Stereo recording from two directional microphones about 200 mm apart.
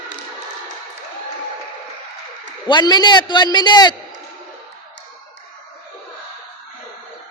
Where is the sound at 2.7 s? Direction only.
20° left (ahead or behind).